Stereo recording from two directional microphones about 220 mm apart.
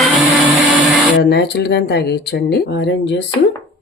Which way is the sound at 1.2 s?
45° left (ahead or behind).